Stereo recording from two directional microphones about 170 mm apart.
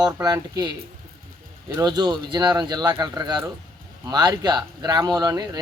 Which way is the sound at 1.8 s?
25° right (ahead or behind).